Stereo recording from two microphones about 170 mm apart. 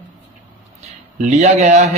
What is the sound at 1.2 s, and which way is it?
Speech, 45° right (ahead or behind).